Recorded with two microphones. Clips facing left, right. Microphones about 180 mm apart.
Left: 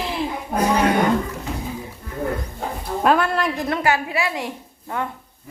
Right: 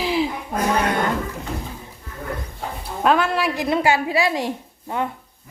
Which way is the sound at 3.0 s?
Centre (ahead or behind).